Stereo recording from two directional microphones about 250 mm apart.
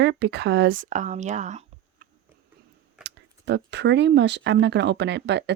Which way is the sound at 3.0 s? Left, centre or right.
Right.